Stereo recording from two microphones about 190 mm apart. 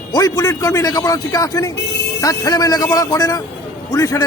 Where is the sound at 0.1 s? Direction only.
20° left (ahead or behind).